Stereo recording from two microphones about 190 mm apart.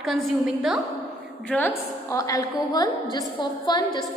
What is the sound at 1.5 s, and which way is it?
A woman's voice, 10° left (ahead or behind).